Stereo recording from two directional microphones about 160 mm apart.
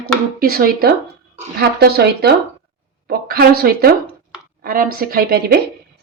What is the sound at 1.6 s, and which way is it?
Speech, 80° right.